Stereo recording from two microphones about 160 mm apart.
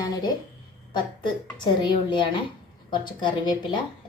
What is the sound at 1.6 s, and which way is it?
A woman's voice, 30° left (ahead or behind).